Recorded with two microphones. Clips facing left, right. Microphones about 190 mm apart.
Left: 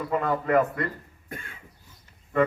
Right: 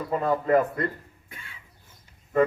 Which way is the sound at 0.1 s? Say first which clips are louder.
Right 2 dB; 35° right (ahead or behind).